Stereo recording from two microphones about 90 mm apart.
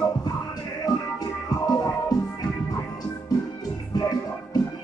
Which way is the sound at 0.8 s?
45° left (ahead or behind).